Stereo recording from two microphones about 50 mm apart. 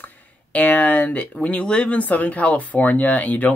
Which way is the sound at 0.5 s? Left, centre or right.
Left.